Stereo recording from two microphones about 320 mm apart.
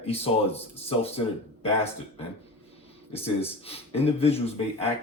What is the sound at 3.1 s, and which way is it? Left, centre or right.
Speech, centre.